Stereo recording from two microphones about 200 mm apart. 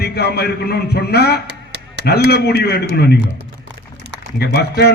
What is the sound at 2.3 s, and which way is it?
Speech, 55° left (ahead or behind).